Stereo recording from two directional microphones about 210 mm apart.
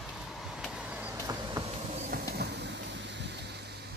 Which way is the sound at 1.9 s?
35° right (ahead or behind).